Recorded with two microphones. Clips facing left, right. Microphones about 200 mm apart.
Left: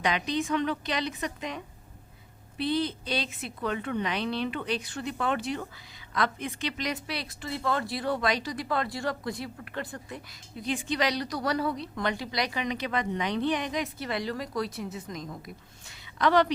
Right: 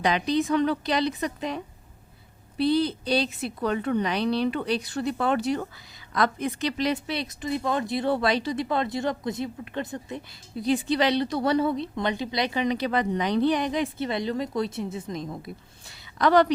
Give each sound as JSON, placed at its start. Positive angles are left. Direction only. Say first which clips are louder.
{"t": 0.0, "sound": "a woman's voice", "louder": "right 5 dB", "side_deg": -35}
{"t": 10.6, "sound": "a woman's voice", "louder": "right 6 dB", "side_deg": -35}
{"t": 15.9, "sound": "a sound", "louder": "right 4 dB", "side_deg": -40}